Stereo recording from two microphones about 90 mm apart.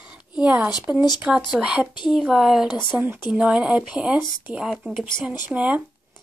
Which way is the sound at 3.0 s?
15° right (ahead or behind).